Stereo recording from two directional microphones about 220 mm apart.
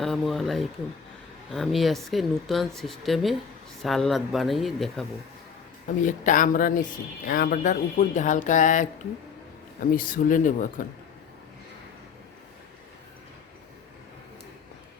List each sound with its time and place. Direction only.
0.0 s speech: centre (ahead or behind)
6.1 s speech: 35° left (ahead or behind)
9.9 s speech: 40° left (ahead or behind)